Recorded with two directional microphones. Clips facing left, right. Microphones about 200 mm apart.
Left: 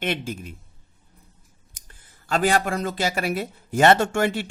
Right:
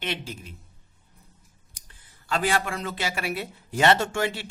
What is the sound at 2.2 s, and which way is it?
Speech, 45° left (ahead or behind).